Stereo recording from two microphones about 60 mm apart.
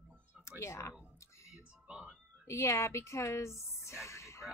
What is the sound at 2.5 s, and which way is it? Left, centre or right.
A woman's voice, left.